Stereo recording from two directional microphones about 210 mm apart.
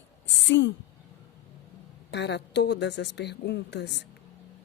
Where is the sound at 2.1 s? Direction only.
55° left (ahead or behind).